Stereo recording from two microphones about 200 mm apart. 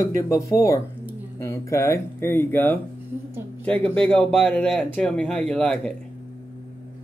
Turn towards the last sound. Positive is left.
turn(degrees=5)  # may be behind; listen again after turning